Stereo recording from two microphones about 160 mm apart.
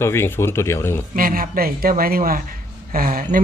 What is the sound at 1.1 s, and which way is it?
A man's voice, 60° right (ahead or behind).